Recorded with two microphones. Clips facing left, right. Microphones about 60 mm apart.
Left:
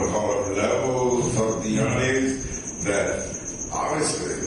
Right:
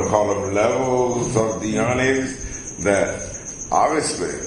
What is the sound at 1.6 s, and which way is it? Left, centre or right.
Mantra, right.